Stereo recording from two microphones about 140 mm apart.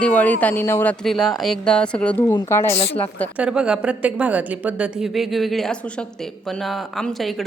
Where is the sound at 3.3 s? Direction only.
10° right (ahead or behind).